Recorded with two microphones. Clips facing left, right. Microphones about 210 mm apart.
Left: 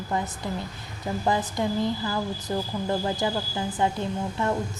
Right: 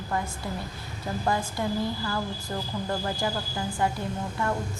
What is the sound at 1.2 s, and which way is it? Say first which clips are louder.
A woman's voice: left 3 dB; 20° left (ahead or behind).